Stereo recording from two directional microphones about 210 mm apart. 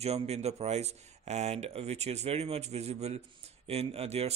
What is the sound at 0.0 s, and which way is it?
Speech, 30° right (ahead or behind).